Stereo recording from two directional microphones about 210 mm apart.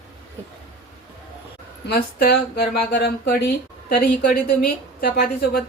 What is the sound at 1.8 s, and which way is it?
Speech, 45° left (ahead or behind).